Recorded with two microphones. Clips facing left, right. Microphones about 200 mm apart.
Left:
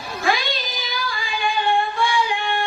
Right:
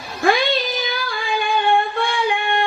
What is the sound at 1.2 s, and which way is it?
Singing, 60° right (ahead or behind).